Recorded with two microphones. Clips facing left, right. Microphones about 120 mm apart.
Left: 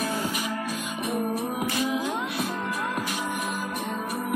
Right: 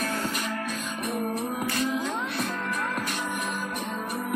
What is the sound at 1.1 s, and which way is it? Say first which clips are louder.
Music: left 2 dB; 5° left (ahead or behind).